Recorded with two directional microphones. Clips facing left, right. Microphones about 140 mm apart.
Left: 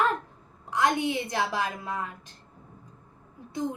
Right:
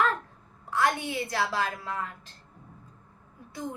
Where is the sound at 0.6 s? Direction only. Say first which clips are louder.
Left 2 dB; 20° left (ahead or behind).